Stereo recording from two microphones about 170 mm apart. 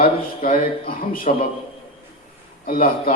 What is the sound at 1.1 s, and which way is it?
Speech, 55° left (ahead or behind).